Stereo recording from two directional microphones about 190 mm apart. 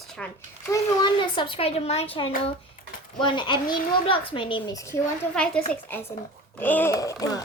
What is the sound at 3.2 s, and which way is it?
A child's voice, 25° left (ahead or behind).